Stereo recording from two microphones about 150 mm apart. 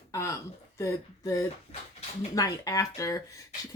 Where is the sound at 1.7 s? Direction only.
45° left (ahead or behind).